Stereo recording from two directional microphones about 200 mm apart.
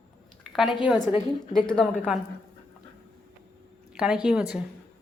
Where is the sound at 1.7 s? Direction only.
Centre (ahead or behind).